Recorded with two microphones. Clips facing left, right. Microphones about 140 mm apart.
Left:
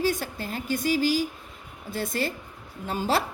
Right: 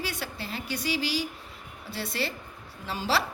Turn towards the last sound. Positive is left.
turn(degrees=50)  # may be behind; listen again after turning